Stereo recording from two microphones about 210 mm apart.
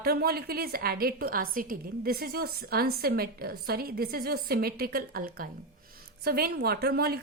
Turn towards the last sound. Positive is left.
turn(degrees=-45)  # may be behind; listen again after turning